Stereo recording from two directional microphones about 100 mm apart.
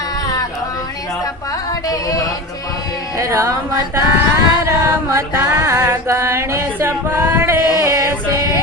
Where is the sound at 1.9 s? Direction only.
35° left (ahead or behind).